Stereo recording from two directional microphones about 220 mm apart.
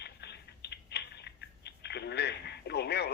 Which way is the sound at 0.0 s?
50° left (ahead or behind).